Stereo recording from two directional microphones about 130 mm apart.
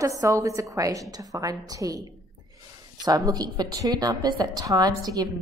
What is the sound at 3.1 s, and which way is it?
A woman's voice, 30° right (ahead or behind).